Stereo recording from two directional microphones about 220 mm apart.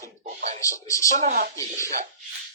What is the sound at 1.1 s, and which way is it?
Speech, 35° right (ahead or behind).